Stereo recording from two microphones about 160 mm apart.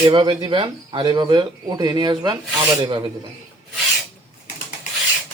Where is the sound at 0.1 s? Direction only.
30° right (ahead or behind).